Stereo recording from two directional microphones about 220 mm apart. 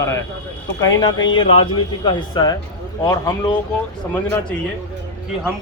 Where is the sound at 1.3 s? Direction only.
25° left (ahead or behind).